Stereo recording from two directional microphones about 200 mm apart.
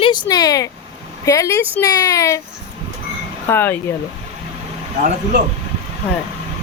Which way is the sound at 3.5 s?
10° left (ahead or behind).